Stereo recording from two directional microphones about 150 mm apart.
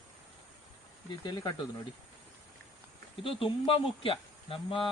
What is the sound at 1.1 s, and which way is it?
Speech, 30° left (ahead or behind).